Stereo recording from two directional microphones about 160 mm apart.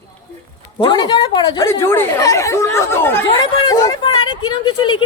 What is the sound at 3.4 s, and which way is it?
Speech, 25° left (ahead or behind).